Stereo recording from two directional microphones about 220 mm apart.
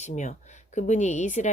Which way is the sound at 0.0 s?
35° left (ahead or behind).